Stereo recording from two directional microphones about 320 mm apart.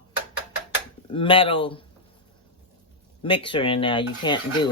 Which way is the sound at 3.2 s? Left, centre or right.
Centre.